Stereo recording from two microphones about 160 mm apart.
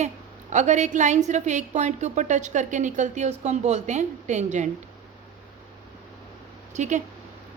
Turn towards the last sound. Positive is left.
turn(degrees=-50)  # may be behind; listen again after turning